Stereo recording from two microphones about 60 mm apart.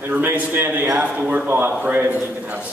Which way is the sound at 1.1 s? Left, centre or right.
Centre.